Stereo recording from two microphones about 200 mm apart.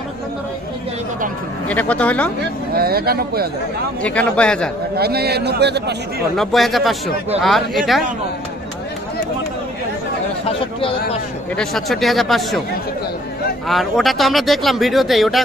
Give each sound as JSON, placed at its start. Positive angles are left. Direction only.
{"t": 1.7, "sound": "speech", "side_deg": 5}
{"t": 2.7, "sound": "a man's voice", "side_deg": -50}
{"t": 4.0, "sound": "speech", "side_deg": 5}
{"t": 4.9, "sound": "a man's voice", "side_deg": -50}
{"t": 6.3, "sound": "speech", "side_deg": 0}
{"t": 11.5, "sound": "speech", "side_deg": 0}
{"t": 13.7, "sound": "speech", "side_deg": 0}